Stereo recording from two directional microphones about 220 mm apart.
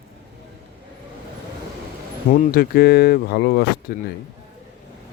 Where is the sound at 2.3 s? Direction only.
40° left (ahead or behind).